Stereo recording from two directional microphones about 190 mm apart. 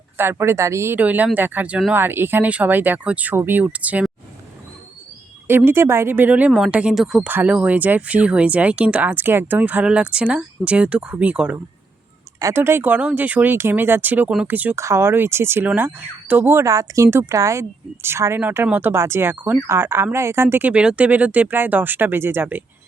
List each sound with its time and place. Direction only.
0.2 s speech: 10° right (ahead or behind)
5.5 s speech: 10° right (ahead or behind)